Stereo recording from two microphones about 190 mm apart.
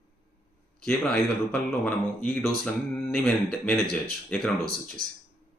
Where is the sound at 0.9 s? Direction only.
5° left (ahead or behind).